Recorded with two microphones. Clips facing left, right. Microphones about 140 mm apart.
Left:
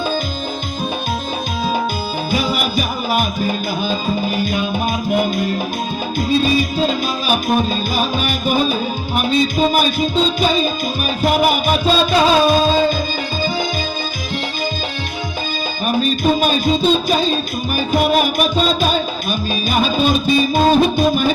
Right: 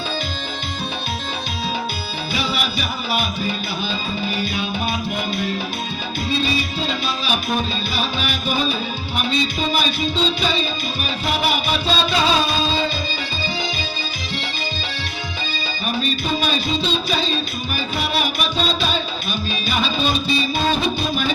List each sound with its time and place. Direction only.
2.3 s music: 45° left (ahead or behind)
15.9 s music: 45° left (ahead or behind)